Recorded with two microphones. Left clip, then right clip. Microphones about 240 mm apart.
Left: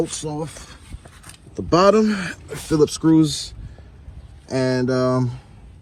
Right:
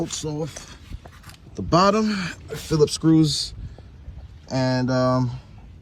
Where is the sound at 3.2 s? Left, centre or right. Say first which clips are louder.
Left 2 dB; centre.